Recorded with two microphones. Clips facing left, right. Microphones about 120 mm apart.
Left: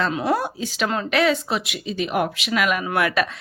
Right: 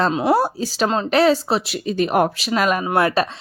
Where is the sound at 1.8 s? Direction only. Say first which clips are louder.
Right 6 dB; 45° right (ahead or behind).